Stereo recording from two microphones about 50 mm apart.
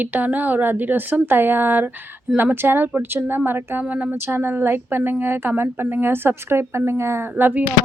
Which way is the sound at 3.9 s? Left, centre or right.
Right.